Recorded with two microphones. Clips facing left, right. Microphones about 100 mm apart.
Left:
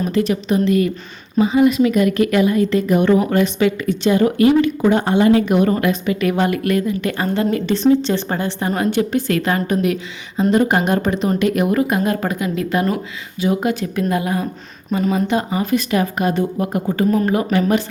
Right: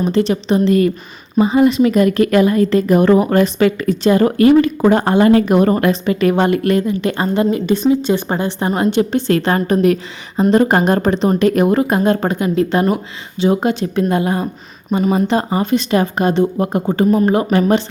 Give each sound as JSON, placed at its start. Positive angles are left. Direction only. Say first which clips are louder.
{"t": 0.0, "sound": "speech", "louder": "right 3 dB", "side_deg": -30}